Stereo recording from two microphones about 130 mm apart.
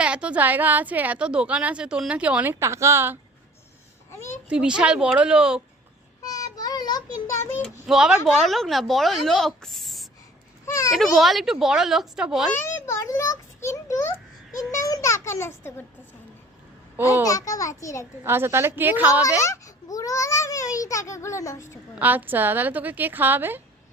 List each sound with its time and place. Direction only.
0.0 s a woman's voice: 10° right (ahead or behind)
4.4 s a woman's voice: 5° right (ahead or behind)
6.3 s a child's voice: 30° left (ahead or behind)
7.6 s speech: 5° right (ahead or behind)
10.7 s a child's voice: 25° left (ahead or behind)
10.9 s speech: centre (ahead or behind)
12.5 s a child's voice: 20° left (ahead or behind)
17.2 s a child's voice: 25° left (ahead or behind)
18.2 s a woman's voice: 20° right (ahead or behind)
19.4 s a child's voice: 25° left (ahead or behind)
21.9 s a woman's voice: 15° right (ahead or behind)